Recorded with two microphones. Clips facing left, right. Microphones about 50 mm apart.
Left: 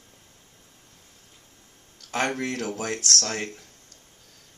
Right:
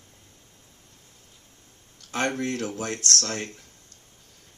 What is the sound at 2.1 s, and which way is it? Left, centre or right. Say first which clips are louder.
Speech: even; left.